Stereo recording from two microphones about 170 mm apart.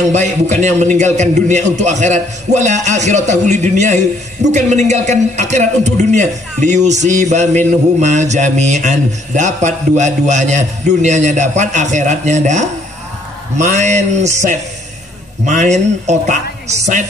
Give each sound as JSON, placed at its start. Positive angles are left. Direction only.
{"t": 0.1, "sound": "speech", "side_deg": -45}